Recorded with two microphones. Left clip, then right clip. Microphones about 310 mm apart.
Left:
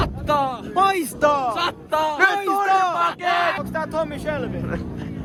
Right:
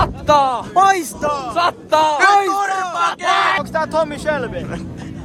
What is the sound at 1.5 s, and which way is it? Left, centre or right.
Speech, centre.